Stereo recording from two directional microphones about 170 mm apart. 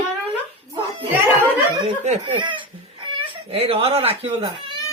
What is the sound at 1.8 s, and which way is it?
Speech, 35° right (ahead or behind).